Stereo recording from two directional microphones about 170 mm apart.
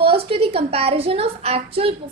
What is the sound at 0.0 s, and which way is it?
A woman's voice, 35° right (ahead or behind).